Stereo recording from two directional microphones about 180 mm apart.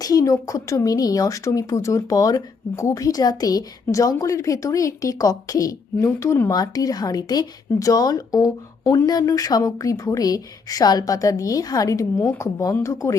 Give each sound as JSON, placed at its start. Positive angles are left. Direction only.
{"t": 0.0, "sound": "speech", "side_deg": 20}